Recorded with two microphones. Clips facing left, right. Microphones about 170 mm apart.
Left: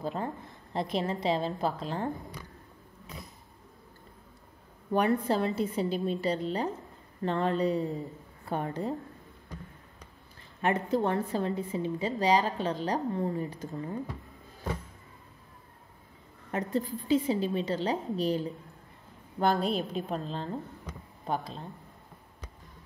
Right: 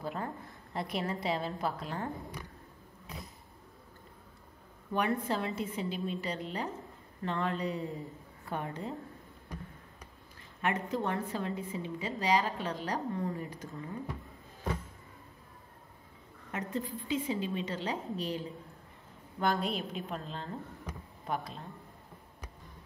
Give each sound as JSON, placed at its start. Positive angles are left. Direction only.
{"t": 0.0, "sound": "a woman's voice", "side_deg": 25}
{"t": 4.9, "sound": "a woman's voice", "side_deg": 35}
{"t": 10.6, "sound": "a woman's voice", "side_deg": 35}
{"t": 16.5, "sound": "a woman's voice", "side_deg": 35}